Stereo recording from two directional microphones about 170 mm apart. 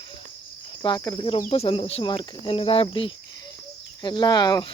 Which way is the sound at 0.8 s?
25° left (ahead or behind).